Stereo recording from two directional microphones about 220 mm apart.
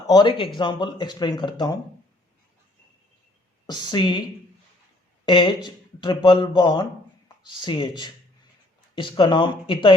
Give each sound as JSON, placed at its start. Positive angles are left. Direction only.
{"t": 0.1, "sound": "speech", "side_deg": 20}
{"t": 3.7, "sound": "speech", "side_deg": 20}
{"t": 5.2, "sound": "speech", "side_deg": 20}